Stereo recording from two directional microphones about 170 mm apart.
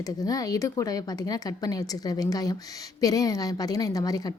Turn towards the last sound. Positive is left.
turn(degrees=20)  # may be behind; listen again after turning